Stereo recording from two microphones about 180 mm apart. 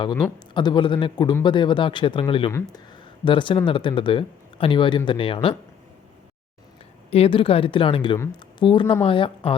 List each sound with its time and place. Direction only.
0.0 s speech: 25° left (ahead or behind)
2.5 s speech: 20° left (ahead or behind)
7.1 s speech: 30° left (ahead or behind)